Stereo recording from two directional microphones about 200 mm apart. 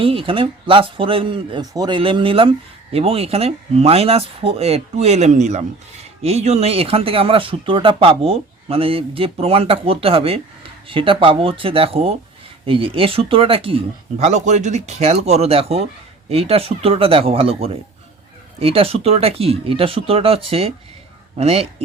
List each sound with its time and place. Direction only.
0.0 s speech: 25° right (ahead or behind)